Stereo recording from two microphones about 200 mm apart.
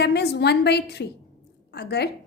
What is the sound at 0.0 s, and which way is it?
A woman's voice, 55° left (ahead or behind).